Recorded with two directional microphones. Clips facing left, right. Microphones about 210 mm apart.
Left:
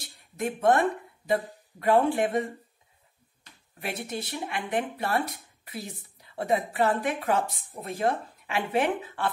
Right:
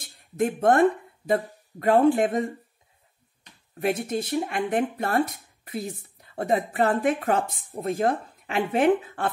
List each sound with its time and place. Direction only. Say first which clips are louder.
0.4 s speech: right 4 dB; 50° right (ahead or behind)
3.8 s speech: right 8 dB; 45° right (ahead or behind)